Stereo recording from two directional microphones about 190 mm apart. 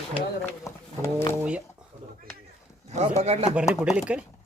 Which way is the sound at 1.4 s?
5° right (ahead or behind).